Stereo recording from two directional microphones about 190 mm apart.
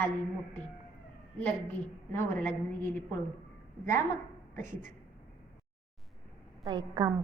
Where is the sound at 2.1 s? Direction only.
10° left (ahead or behind).